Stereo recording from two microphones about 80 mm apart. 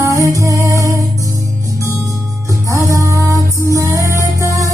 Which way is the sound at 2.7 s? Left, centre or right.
Right.